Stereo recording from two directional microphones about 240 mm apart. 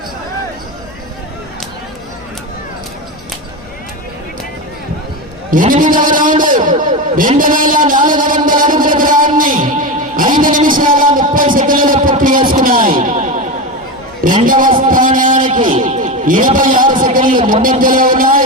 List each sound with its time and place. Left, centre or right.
5.5 s a man's voice: right
14.4 s a man's voice: right